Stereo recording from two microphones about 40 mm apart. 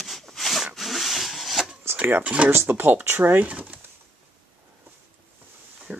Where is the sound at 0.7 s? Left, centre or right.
Centre.